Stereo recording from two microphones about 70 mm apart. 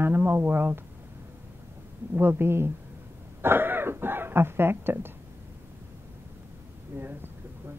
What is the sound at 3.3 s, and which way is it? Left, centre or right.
Throat clearing, right.